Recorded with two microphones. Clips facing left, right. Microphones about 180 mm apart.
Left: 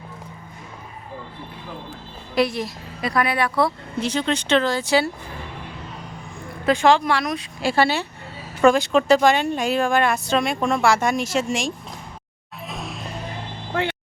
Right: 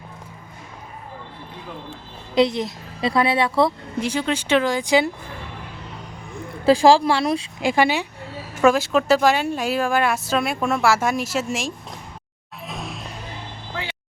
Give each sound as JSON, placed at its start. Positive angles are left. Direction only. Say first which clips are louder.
{"t": 2.3, "sound": "a woman's voice", "louder": "right 3 dB", "side_deg": -20}
{"t": 4.0, "sound": "speech", "louder": "left 1 dB", "side_deg": -10}
{"t": 6.7, "sound": "speech", "louder": "right 3 dB", "side_deg": -30}
{"t": 7.6, "sound": "speech", "louder": "even", "side_deg": -15}
{"t": 8.6, "sound": "a woman's voice", "louder": "left 1 dB", "side_deg": -5}
{"t": 12.6, "sound": "music", "louder": "even", "side_deg": 0}